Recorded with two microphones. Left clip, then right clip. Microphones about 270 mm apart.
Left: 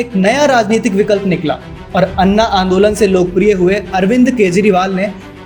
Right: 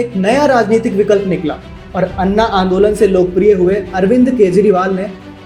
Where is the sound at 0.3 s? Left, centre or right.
Left.